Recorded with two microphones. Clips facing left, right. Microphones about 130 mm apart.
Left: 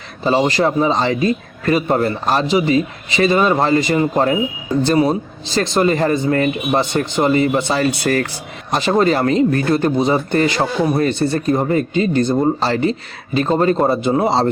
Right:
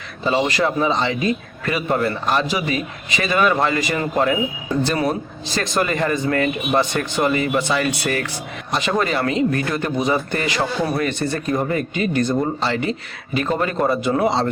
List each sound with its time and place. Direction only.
0.3 s speech: 30° left (ahead or behind)